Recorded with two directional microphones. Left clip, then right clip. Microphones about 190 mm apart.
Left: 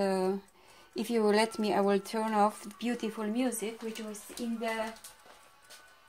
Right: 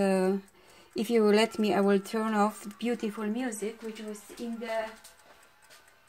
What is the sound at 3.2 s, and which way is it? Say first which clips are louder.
Speech: left 1 dB; 15° right (ahead or behind).